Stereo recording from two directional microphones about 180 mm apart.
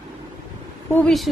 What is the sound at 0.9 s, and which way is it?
Speech, centre (ahead or behind).